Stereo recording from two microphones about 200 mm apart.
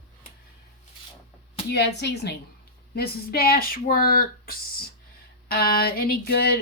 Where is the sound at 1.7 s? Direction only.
55° left (ahead or behind).